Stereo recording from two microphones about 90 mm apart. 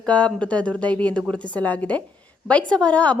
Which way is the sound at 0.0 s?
10° left (ahead or behind).